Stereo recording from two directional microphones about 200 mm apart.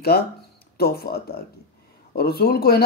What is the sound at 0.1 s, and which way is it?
A man's voice, 50° left (ahead or behind).